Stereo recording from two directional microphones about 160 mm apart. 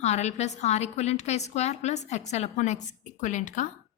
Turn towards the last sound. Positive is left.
turn(degrees=50)  # may be behind; listen again after turning